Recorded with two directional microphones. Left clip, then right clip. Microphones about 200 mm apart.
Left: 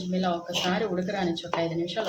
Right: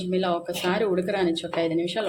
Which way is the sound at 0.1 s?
45° right (ahead or behind).